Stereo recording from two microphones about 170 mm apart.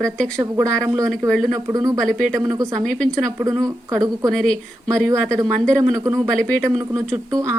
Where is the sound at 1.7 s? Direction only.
20° right (ahead or behind).